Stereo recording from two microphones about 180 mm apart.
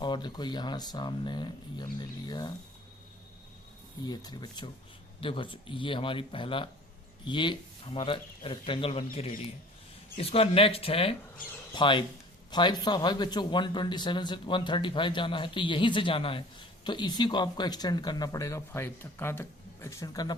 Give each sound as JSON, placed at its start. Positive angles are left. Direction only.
{"t": 0.0, "sound": "speech", "side_deg": 25}
{"t": 4.0, "sound": "speech", "side_deg": 20}
{"t": 10.2, "sound": "speech", "side_deg": 35}